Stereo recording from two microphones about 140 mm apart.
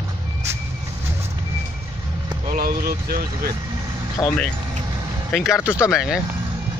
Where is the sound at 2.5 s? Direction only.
90° right.